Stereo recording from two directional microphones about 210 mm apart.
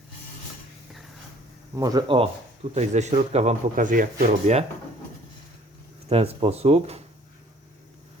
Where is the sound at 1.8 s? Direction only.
15° right (ahead or behind).